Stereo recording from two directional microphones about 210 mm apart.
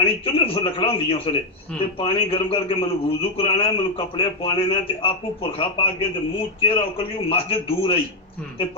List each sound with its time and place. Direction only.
0.0 s a man's voice: 25° left (ahead or behind)